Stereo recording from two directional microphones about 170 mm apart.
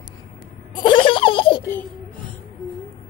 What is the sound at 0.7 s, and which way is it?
Baby laughter, 30° left (ahead or behind).